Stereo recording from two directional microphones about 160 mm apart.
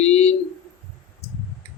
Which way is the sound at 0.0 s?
40° left (ahead or behind).